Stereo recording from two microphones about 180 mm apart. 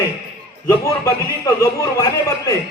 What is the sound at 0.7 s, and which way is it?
Speech, 20° left (ahead or behind).